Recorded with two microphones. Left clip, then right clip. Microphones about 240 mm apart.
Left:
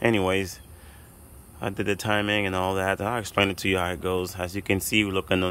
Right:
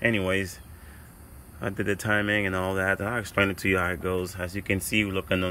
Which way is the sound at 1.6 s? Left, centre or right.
Centre.